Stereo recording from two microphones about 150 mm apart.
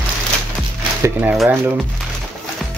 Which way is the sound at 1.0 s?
15° right (ahead or behind).